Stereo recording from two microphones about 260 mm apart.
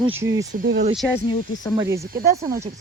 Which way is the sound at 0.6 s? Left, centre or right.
Right.